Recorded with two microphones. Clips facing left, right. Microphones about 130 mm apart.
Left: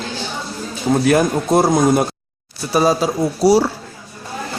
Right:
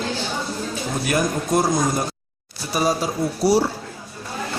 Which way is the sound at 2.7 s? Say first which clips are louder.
Left 6 dB; 85° left.